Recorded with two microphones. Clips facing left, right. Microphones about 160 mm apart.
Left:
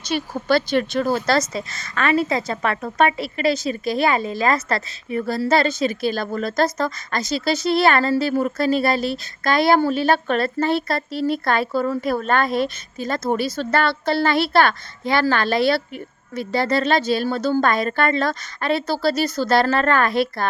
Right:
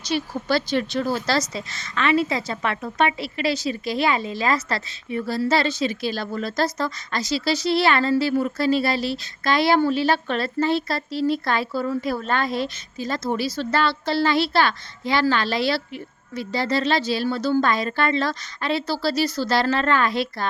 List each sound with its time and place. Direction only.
0.0 s a woman's voice: 55° left (ahead or behind)